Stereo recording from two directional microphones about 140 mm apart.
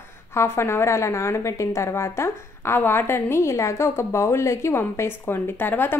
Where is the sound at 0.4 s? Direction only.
20° left (ahead or behind).